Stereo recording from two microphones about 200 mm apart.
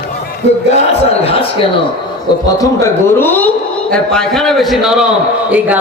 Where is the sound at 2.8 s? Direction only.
10° left (ahead or behind).